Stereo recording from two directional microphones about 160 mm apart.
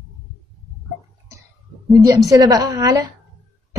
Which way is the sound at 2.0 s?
20° right (ahead or behind).